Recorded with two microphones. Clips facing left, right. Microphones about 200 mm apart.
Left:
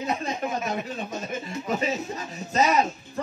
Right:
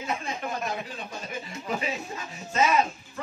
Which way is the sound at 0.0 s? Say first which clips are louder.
Left 4 dB; 40° left (ahead or behind).